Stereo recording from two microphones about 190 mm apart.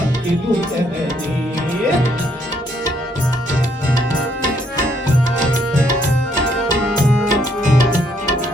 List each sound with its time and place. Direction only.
7.3 s music: 40° right (ahead or behind)